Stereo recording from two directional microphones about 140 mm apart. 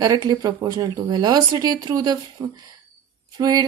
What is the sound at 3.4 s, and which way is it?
Speech, 25° right (ahead or behind).